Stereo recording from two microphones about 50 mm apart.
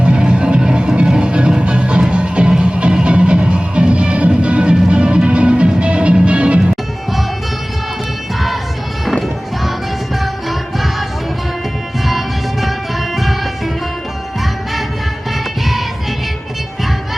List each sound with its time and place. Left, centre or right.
0.0 s music: centre
10.2 s music: centre
12.0 s music: centre